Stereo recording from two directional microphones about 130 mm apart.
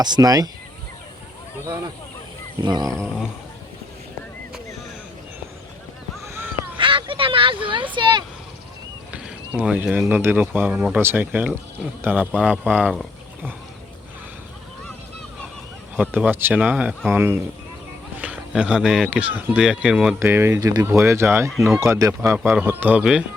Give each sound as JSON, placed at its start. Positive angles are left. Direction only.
{"t": 0.0, "sound": "speech", "side_deg": -30}
{"t": 2.6, "sound": "speech", "side_deg": -35}
{"t": 6.2, "sound": "crow", "side_deg": -20}
{"t": 6.7, "sound": "vehicle", "side_deg": -40}
{"t": 7.9, "sound": "a sound", "side_deg": -35}
{"t": 9.6, "sound": "speech", "side_deg": -10}
{"t": 16.0, "sound": "speech", "side_deg": -15}
{"t": 20.1, "sound": "speech", "side_deg": -20}
{"t": 20.6, "sound": "speech", "side_deg": -30}
{"t": 21.5, "sound": "speech", "side_deg": 0}
{"t": 21.8, "sound": "speech", "side_deg": -25}